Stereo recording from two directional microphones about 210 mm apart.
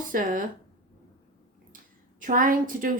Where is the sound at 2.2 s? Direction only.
40° right (ahead or behind).